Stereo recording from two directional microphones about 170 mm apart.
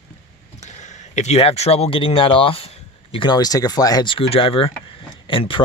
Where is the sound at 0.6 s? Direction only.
45° left (ahead or behind).